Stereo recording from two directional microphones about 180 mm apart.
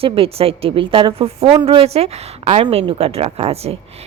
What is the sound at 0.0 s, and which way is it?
A woman's voice, 30° right (ahead or behind).